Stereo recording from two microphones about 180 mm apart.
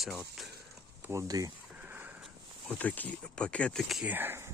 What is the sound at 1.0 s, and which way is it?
Speech, 15° right (ahead or behind).